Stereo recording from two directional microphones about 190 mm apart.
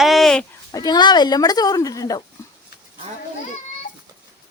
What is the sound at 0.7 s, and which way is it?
Speech, 20° left (ahead or behind).